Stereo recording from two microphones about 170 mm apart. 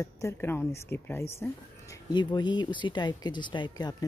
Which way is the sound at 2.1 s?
25° left (ahead or behind).